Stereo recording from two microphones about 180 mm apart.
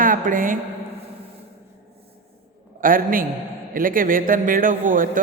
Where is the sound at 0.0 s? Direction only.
50° right (ahead or behind).